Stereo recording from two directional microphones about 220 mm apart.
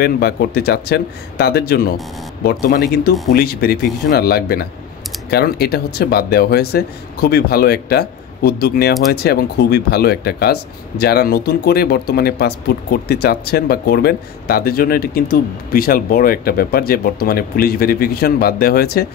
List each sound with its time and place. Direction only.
0.0 s speech: 45° left (ahead or behind)